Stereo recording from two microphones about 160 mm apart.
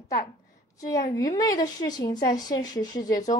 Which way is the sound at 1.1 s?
20° left (ahead or behind).